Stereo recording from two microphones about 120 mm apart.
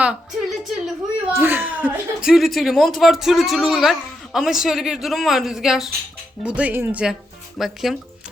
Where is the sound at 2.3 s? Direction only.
Centre (ahead or behind).